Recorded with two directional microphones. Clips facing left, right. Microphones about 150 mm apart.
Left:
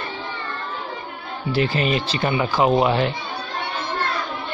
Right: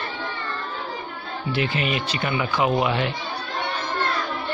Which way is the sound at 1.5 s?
35° left (ahead or behind).